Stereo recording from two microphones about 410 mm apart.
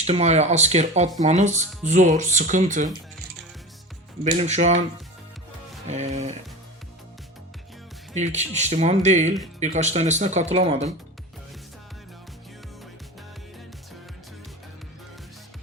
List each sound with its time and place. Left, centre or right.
0.0 s speech: centre
4.2 s speech: centre
5.9 s speech: centre
8.1 s speech: centre